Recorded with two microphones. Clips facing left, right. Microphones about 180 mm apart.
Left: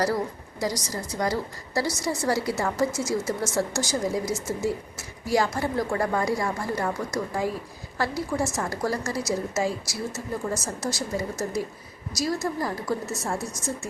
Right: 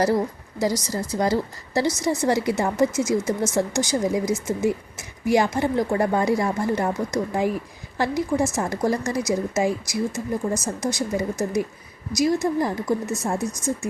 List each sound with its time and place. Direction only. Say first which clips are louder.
0.6 s a woman's voice: right 5 dB; 25° right (ahead or behind)